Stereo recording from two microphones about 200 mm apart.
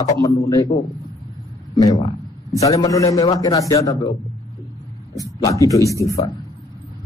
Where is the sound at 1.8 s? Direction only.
15° left (ahead or behind).